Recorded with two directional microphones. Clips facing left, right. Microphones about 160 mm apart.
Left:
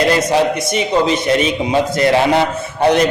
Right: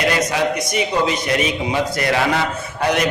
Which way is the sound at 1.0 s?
25° left (ahead or behind).